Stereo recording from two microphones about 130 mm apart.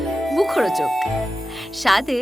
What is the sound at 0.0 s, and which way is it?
Speech, centre (ahead or behind).